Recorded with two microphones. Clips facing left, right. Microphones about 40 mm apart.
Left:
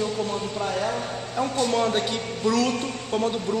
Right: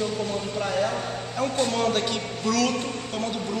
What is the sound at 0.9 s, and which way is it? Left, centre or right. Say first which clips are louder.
Music: left 1 dB; centre.